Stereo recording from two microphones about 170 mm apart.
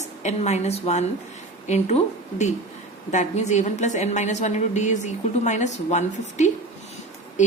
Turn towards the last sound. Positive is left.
turn(degrees=45)  # may be behind; listen again after turning